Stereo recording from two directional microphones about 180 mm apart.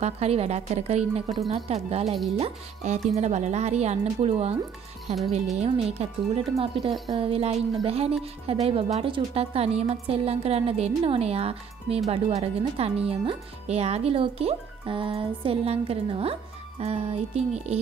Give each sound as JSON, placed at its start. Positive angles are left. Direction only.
{"t": 0.0, "sound": "speech", "side_deg": -35}